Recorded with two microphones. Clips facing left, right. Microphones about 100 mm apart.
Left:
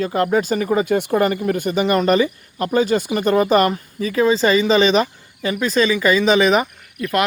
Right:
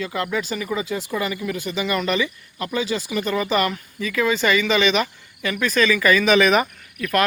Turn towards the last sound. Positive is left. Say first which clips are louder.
# left 1 dB
turn(degrees=20)  # may be behind; listen again after turning